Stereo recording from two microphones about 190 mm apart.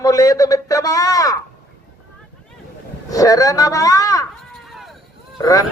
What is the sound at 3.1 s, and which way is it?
Speech, 20° left (ahead or behind).